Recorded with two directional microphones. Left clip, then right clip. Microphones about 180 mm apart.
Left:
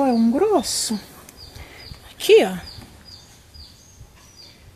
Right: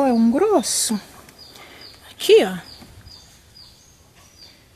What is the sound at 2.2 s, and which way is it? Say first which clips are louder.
Speech: even; 5° right (ahead or behind).